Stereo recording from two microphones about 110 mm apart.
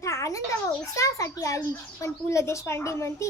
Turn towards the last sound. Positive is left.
turn(degrees=25)  # may be behind; listen again after turning